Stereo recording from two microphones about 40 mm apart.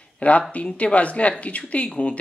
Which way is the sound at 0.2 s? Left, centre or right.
Left.